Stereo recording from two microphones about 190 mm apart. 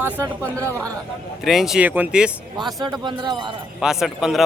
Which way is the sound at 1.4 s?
Centre (ahead or behind).